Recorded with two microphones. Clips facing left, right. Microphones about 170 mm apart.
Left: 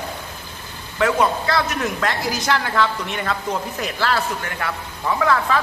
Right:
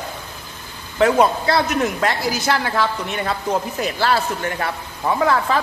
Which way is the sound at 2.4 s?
10° right (ahead or behind).